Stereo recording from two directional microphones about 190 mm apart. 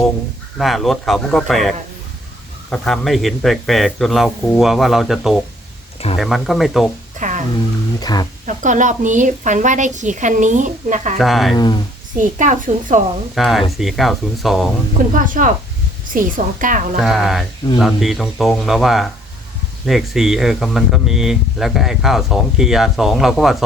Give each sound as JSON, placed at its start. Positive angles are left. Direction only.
{"t": 0.6, "sound": "speech", "side_deg": 0}
{"t": 7.2, "sound": "music", "side_deg": -40}
{"t": 7.9, "sound": "speech", "side_deg": 20}
{"t": 8.4, "sound": "a woman's voice", "side_deg": -40}
{"t": 11.2, "sound": "speech", "side_deg": 0}
{"t": 11.5, "sound": "speech", "side_deg": 20}
{"t": 12.1, "sound": "a woman's voice", "side_deg": -40}
{"t": 13.3, "sound": "speech", "side_deg": 0}
{"t": 15.2, "sound": "a woman's voice", "side_deg": -45}
{"t": 17.0, "sound": "speech", "side_deg": 0}